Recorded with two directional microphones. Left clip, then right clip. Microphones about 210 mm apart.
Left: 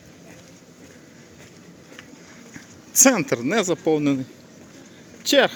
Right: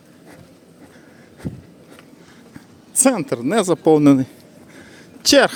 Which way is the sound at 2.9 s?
10° right (ahead or behind).